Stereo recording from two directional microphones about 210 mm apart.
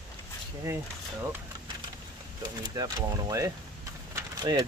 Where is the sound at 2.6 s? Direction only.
20° right (ahead or behind).